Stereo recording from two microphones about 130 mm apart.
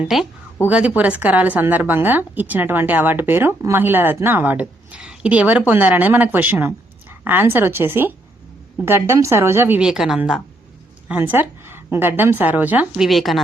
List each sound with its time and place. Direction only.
0.0 s a woman's voice: centre (ahead or behind)
11.1 s speech: 15° right (ahead or behind)